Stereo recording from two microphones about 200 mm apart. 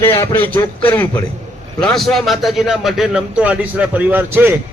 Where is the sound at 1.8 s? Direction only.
Centre (ahead or behind).